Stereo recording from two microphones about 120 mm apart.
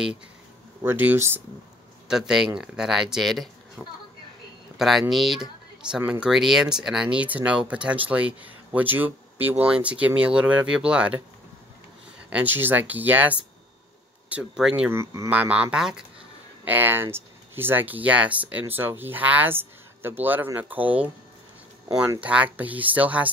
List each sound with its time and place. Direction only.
0.8 s speech: 15° right (ahead or behind)
2.0 s speech: 5° right (ahead or behind)
12.3 s speech: 15° right (ahead or behind)
14.9 s speech: 20° right (ahead or behind)
22.2 s speech: 10° right (ahead or behind)